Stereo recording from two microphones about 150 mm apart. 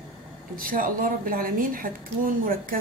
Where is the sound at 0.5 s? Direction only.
70° right (ahead or behind).